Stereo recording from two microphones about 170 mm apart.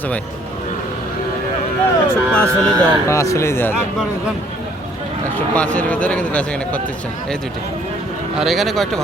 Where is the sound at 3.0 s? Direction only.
20° left (ahead or behind).